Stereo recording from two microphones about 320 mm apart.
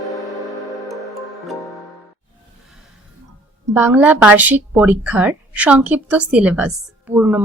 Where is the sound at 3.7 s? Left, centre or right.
Centre.